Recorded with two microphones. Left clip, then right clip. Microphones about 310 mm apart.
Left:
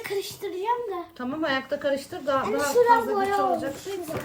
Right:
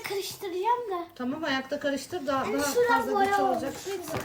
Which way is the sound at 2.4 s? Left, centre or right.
Centre.